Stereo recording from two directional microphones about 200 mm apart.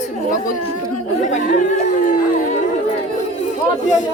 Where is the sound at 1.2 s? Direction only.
40° left (ahead or behind).